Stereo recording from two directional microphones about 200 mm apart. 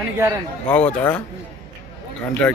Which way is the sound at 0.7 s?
5° left (ahead or behind).